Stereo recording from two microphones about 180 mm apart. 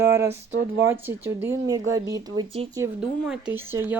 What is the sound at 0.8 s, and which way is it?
Speech, 10° right (ahead or behind).